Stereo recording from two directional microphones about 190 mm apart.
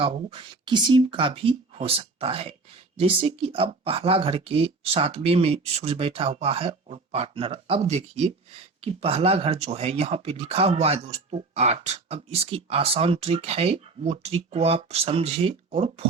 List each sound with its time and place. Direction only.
0.0 s speech: 25° right (ahead or behind)